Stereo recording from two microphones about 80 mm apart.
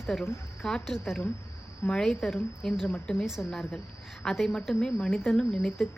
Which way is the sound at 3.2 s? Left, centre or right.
Centre.